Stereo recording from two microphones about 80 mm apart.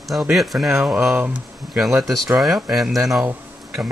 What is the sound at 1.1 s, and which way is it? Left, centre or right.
Speech, centre.